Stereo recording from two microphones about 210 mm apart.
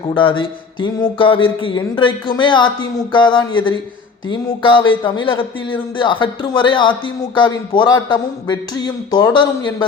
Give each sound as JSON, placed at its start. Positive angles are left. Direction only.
{"t": 0.1, "sound": "speech", "side_deg": 25}